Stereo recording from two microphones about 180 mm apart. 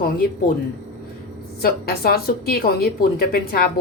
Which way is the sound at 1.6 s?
55° left (ahead or behind).